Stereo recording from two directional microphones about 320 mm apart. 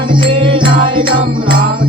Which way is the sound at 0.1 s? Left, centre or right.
Centre.